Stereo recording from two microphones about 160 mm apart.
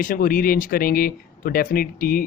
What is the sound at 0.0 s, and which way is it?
Speech, 60° left (ahead or behind).